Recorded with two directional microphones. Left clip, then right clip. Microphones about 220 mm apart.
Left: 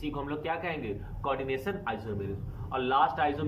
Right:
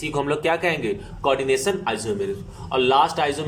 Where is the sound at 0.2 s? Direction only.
25° right (ahead or behind).